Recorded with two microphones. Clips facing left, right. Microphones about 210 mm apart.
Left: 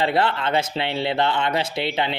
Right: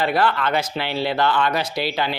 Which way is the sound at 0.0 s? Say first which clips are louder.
Right 1 dB; 25° left (ahead or behind).